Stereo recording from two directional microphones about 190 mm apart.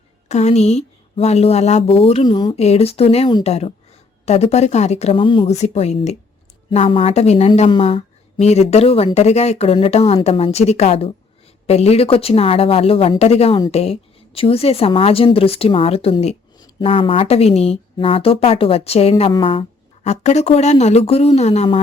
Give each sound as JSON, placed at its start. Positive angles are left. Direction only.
{"t": 0.3, "sound": "a woman's voice", "side_deg": 35}
{"t": 2.6, "sound": "a woman's voice", "side_deg": 35}